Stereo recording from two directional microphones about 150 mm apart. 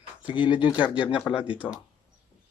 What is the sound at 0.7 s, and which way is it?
Speech, 10° right (ahead or behind).